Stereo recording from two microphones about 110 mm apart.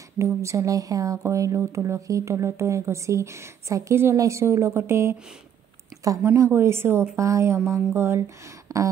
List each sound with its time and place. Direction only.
0.2 s speech: 25° right (ahead or behind)